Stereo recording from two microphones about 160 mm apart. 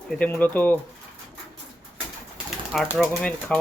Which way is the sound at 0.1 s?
10° left (ahead or behind).